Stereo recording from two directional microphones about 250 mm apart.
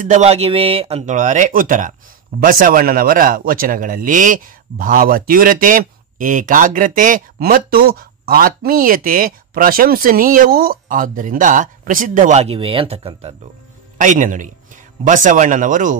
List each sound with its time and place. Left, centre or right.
0.1 s speech: right